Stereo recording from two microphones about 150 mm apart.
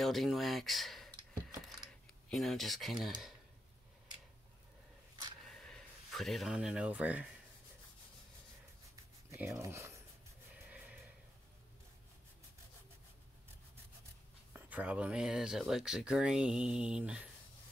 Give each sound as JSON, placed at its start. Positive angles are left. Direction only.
{"t": 0.0, "sound": "speech", "side_deg": 0}
{"t": 1.7, "sound": "typing", "side_deg": 0}
{"t": 5.5, "sound": "speech", "side_deg": 5}
{"t": 8.9, "sound": "a sound", "side_deg": -20}
{"t": 10.5, "sound": "snort", "side_deg": -10}
{"t": 14.5, "sound": "speech", "side_deg": -10}